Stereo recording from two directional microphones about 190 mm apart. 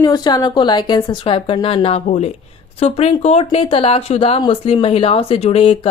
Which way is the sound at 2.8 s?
30° left (ahead or behind).